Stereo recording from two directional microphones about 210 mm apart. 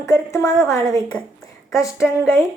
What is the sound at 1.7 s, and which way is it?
Speech, 15° left (ahead or behind).